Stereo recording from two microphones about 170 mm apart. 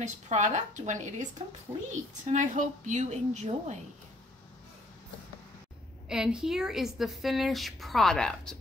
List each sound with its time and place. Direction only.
0.0 s a woman's voice: 45° right (ahead or behind)
6.0 s speech: 5° right (ahead or behind)